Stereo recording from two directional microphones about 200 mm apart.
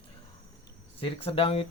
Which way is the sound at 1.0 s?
30° left (ahead or behind).